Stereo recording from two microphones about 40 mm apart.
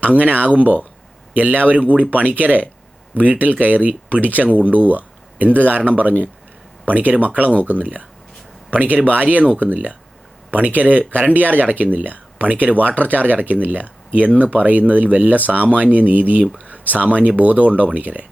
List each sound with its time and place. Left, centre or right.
0.0 s speech: right